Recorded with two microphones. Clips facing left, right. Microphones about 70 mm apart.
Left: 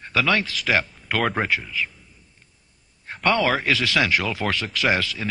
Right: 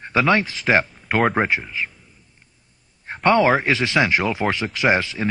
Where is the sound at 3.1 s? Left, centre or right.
Right.